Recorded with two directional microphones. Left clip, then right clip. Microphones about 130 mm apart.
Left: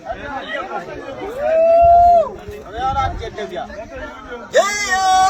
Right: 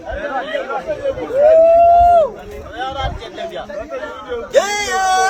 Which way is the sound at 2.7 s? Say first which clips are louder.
Left 4 dB; 15° right (ahead or behind).